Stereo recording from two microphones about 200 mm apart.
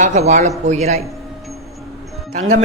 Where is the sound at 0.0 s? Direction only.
35° right (ahead or behind).